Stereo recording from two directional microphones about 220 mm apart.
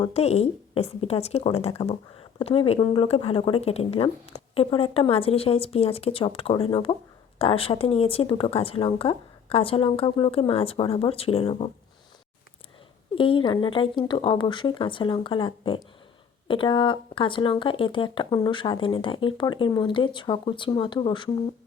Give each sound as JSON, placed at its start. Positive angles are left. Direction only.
{"t": 0.0, "sound": "speech", "side_deg": 30}
{"t": 13.1, "sound": "speech", "side_deg": 25}